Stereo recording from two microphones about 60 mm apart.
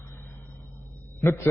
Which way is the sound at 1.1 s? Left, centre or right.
Left.